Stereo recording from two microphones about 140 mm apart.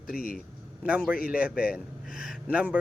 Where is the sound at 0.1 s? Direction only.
90° left.